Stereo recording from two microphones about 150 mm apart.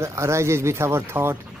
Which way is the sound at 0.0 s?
20° right (ahead or behind).